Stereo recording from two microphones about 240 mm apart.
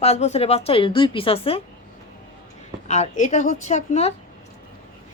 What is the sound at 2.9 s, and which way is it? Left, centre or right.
Speech, left.